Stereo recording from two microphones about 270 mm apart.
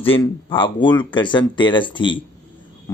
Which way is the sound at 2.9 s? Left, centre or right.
Centre.